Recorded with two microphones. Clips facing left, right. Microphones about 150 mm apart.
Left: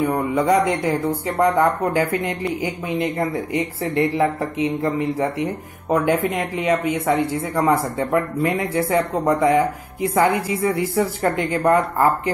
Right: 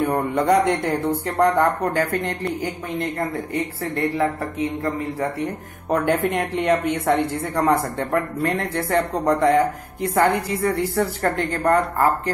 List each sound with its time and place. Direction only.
0.0 s a woman's voice: 5° left (ahead or behind); by 4.9 s 20° left (ahead or behind)
5.4 s a woman's voice: 5° left (ahead or behind)